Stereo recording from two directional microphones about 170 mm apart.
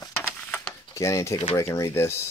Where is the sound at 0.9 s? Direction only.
15° left (ahead or behind).